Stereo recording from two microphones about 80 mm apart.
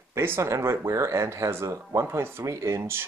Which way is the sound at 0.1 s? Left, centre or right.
Right.